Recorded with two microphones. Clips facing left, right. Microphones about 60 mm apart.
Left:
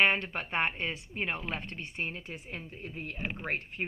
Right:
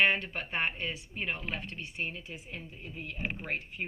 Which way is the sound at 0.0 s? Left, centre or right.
Left.